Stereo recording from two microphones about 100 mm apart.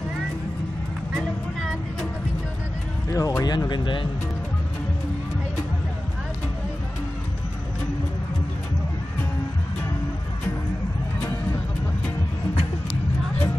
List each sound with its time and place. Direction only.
3.1 s speech: 35° left (ahead or behind); by 4.1 s 55° left (ahead or behind)